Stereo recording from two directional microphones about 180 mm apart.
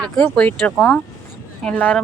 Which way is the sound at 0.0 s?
5° left (ahead or behind).